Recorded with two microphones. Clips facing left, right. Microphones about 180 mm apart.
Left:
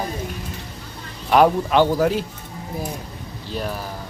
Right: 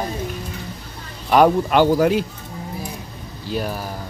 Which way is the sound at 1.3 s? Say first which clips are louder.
Right 1 dB; centre (ahead or behind).